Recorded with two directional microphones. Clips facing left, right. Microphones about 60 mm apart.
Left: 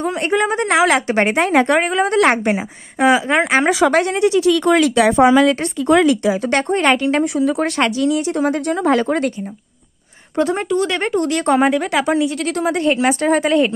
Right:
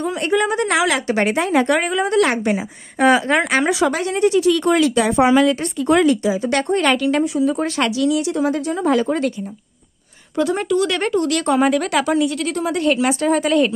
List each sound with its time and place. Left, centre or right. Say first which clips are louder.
0.0 s a woman's voice: left 1 dB; left
3.0 s a woman's voice: even; centre
3.3 s speech: left 2 dB; left
4.0 s speech: left 1 dB; left
4.8 s speech: left 3 dB; left
6.2 s a woman's voice: left 2 dB; left
6.5 s a woman's voice: left 1 dB; left
7.2 s speech: left 1 dB; left
7.8 s a woman's voice: even; left
8.4 s a woman's voice: left 2 dB; left
10.3 s speech: left 1 dB; left
11.6 s a woman's voice: left 1 dB; centre
12.4 s a woman's voice: left 1 dB; left
12.6 s a woman's voice: left 2 dB; left